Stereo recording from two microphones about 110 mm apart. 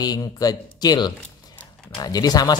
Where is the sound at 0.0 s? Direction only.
35° left (ahead or behind).